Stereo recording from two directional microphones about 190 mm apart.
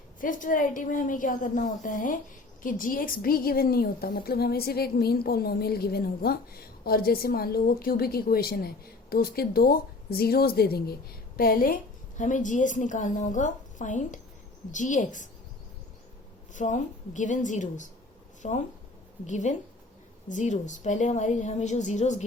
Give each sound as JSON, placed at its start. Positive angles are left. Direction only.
{"t": 0.2, "sound": "a woman's voice", "side_deg": 45}
{"t": 16.6, "sound": "a woman's voice", "side_deg": 40}